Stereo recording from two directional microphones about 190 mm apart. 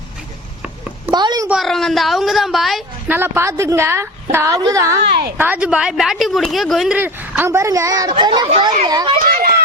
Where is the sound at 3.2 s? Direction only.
10° right (ahead or behind); by 8.9 s 35° right (ahead or behind).